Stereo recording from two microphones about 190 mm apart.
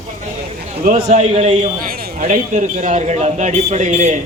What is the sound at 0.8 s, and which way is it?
A man's voice, 40° right (ahead or behind).